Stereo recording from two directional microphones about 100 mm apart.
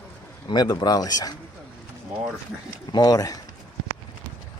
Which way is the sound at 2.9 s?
40° left (ahead or behind).